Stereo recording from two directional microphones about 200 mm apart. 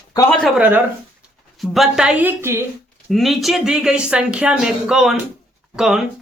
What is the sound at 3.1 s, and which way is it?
Speech, centre (ahead or behind).